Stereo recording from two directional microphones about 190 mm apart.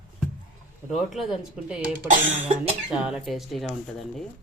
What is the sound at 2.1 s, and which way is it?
Cough, 35° right (ahead or behind).